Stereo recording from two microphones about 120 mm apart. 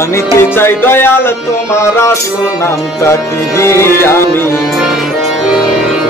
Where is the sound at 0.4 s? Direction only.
20° left (ahead or behind).